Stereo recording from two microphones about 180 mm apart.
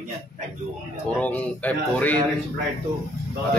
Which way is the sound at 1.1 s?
10° left (ahead or behind).